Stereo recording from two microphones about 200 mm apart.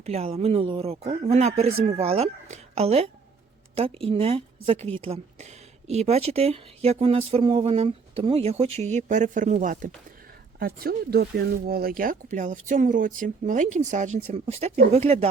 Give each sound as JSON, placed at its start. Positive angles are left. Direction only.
{"t": 0.0, "sound": "a woman's voice", "side_deg": -30}